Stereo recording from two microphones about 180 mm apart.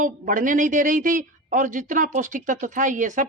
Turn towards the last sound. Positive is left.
turn(degrees=-45)  # may be behind; listen again after turning